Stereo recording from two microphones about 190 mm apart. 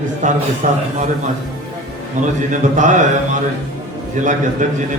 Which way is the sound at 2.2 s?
45° right (ahead or behind).